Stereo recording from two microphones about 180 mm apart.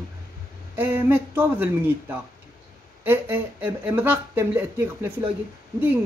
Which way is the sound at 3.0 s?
10° right (ahead or behind).